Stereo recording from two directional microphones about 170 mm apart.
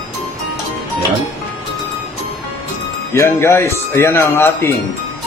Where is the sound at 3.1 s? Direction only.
15° left (ahead or behind).